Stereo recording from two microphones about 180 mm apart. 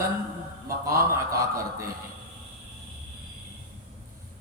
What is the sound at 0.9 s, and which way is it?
A man's voice, 15° right (ahead or behind).